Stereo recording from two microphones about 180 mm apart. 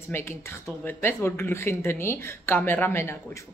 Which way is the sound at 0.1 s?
15° left (ahead or behind).